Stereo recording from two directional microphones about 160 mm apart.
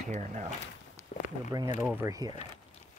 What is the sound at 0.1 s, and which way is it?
Speech, 45° right (ahead or behind).